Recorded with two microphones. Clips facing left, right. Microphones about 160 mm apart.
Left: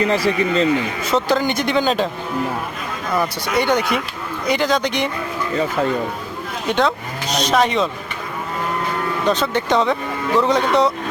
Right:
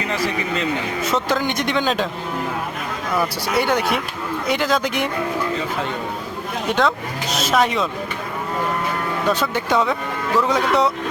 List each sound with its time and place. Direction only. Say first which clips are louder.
0.1 s a man's voice: left 5 dB; 35° left (ahead or behind)
1.0 s speech: left 2 dB; centre (ahead or behind)
3.2 s speech: left 1 dB; 5° right (ahead or behind)
6.7 s speech: left 1 dB; centre (ahead or behind)
9.3 s speech: left 2 dB; 10° right (ahead or behind)